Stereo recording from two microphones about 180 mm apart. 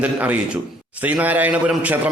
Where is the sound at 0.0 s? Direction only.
5° right (ahead or behind).